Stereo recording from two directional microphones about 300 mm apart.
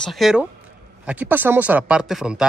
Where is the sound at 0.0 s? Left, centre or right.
Centre.